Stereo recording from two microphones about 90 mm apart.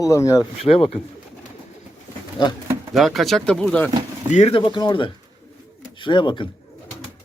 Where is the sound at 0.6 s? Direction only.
90° left.